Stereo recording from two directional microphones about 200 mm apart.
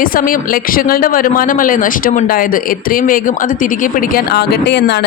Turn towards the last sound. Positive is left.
turn(degrees=55)  # may be behind; listen again after turning